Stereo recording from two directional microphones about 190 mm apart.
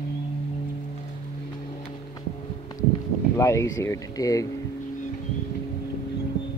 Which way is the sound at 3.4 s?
15° left (ahead or behind).